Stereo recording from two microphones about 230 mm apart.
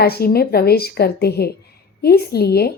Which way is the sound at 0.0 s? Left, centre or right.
Left.